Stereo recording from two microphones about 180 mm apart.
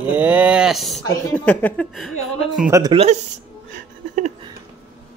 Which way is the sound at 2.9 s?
35° right (ahead or behind).